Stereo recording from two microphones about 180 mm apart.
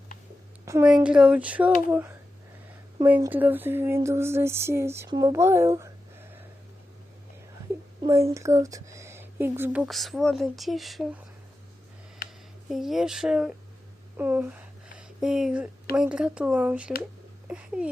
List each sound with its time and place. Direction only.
0.6 s a woman's voice: 15° right (ahead or behind)
1.0 s speech: 5° right (ahead or behind)
8.3 s speech: 15° right (ahead or behind)
9.8 s speech: centre (ahead or behind)
12.7 s a woman's voice: centre (ahead or behind)